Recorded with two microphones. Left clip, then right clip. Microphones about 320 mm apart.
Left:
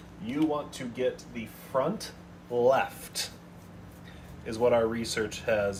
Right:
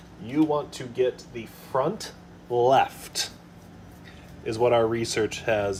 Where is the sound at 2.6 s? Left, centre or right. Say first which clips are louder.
Right 4 dB; right.